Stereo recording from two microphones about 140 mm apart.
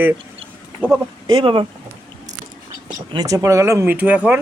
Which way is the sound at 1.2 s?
40° right (ahead or behind).